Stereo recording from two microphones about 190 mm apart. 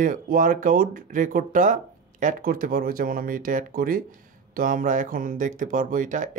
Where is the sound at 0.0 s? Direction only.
45° right (ahead or behind).